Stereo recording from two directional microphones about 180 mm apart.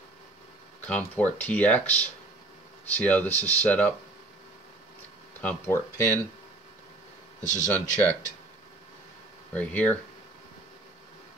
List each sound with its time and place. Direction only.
0.8 s speech: 10° left (ahead or behind)
5.4 s speech: 5° left (ahead or behind)
7.4 s speech: 45° left (ahead or behind)
9.5 s speech: 10° left (ahead or behind)